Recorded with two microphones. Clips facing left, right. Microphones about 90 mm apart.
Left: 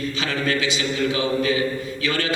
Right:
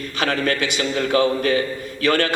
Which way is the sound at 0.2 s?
50° right (ahead or behind).